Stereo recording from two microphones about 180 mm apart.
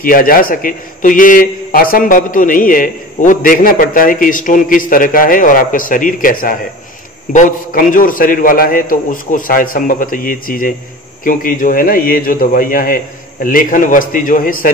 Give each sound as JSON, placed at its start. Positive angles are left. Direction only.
{"t": 0.0, "sound": "a man's voice", "side_deg": 50}